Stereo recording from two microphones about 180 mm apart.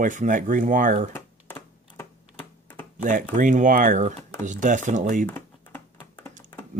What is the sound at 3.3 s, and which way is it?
Speech, 45° right (ahead or behind).